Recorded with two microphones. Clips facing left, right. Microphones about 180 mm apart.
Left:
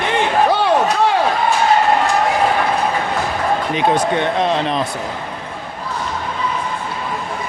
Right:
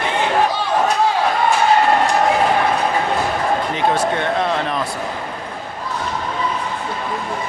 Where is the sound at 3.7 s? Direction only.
20° left (ahead or behind).